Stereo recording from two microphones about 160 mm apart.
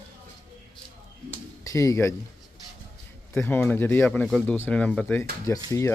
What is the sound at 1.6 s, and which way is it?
Speech, 20° left (ahead or behind).